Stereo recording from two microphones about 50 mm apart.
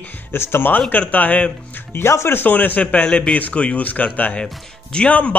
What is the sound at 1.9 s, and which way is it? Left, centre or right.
Speech, left.